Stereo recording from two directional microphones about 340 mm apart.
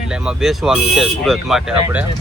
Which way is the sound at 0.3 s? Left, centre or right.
Centre.